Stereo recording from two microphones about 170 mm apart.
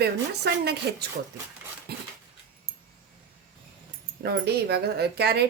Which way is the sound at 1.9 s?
70° right (ahead or behind).